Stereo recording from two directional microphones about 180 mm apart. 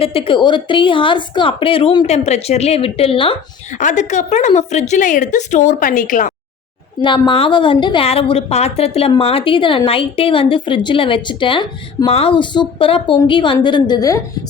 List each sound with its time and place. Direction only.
0.0 s a woman's voice: 30° left (ahead or behind)
2.0 s a woman's voice: 40° left (ahead or behind)
3.8 s a woman's voice: 40° left (ahead or behind)
7.0 s a woman's voice: 25° left (ahead or behind)